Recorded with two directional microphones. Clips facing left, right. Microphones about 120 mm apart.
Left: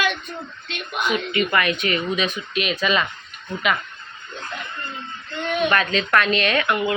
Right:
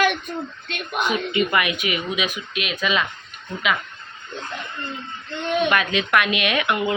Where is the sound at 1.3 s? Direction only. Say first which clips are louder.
Even; 20° right (ahead or behind); by 3.1 s centre (ahead or behind).